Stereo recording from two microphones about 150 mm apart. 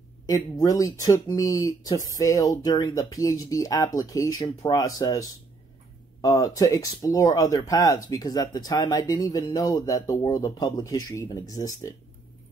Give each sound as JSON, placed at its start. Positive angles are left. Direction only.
{"t": 0.3, "sound": "speech", "side_deg": 25}